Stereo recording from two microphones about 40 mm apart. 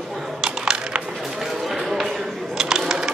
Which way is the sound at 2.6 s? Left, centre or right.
Centre.